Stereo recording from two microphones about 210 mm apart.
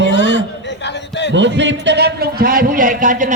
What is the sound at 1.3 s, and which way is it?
A man's voice, 60° right (ahead or behind).